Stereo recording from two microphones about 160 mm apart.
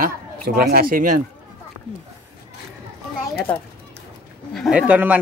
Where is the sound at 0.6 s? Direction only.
70° right (ahead or behind).